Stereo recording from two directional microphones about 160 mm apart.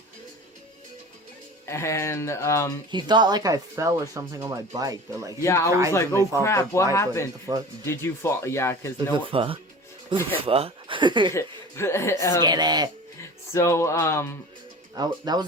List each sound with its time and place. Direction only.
1.6 s speech: 15° left (ahead or behind)
2.9 s speech: 30° right (ahead or behind)
5.4 s speech: 20° left (ahead or behind)
7.5 s speech: 20° right (ahead or behind)
7.9 s speech: 15° left (ahead or behind)
9.1 s speech: 35° right (ahead or behind)
11.3 s speech: 15° left (ahead or behind)
12.4 s speech: 25° right (ahead or behind)
13.5 s speech: 20° left (ahead or behind)
14.9 s speech: 25° right (ahead or behind)